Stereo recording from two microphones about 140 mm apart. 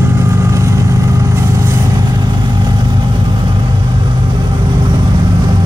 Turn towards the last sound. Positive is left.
turn(degrees=-30)  # may be behind; listen again after turning